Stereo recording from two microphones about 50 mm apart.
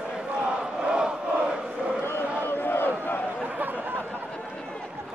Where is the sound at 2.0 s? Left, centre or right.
Left.